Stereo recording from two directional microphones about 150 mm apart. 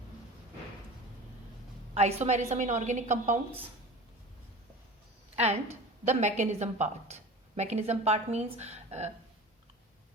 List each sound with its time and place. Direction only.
2.0 s a woman's voice: 45° right (ahead or behind)
6.1 s a woman's voice: 50° right (ahead or behind)